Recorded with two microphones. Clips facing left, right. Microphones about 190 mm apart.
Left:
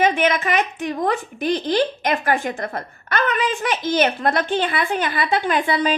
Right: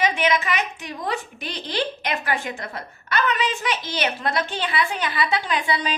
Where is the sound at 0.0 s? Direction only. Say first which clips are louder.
Left 3 dB; 50° left (ahead or behind).